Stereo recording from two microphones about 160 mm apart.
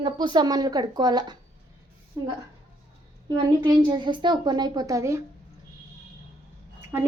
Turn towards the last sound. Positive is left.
turn(degrees=-10)  # may be behind; listen again after turning